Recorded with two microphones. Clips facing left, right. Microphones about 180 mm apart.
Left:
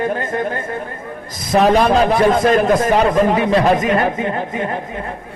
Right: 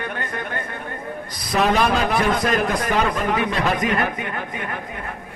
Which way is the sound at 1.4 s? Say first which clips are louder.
Left 6 dB; 45° left (ahead or behind).